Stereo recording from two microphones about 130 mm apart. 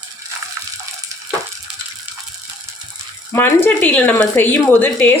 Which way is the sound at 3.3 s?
15° left (ahead or behind).